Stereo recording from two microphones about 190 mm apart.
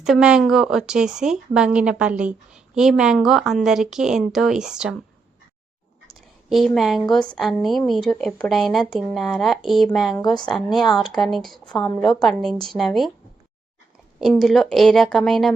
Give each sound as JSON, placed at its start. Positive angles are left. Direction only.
{"t": 0.0, "sound": "speech", "side_deg": -5}
{"t": 6.5, "sound": "speech", "side_deg": 0}
{"t": 11.7, "sound": "a woman's voice", "side_deg": 20}
{"t": 12.3, "sound": "speech", "side_deg": 0}
{"t": 14.2, "sound": "speech", "side_deg": 0}